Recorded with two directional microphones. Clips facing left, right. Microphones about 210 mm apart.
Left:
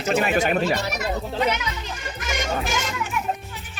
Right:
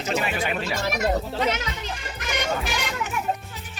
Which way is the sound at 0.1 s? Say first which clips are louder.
Left 6 dB; 50° left (ahead or behind).